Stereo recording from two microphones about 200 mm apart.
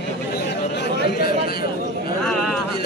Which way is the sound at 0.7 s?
60° left (ahead or behind).